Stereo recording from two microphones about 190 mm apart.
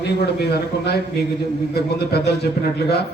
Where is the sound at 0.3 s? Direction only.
55° left (ahead or behind).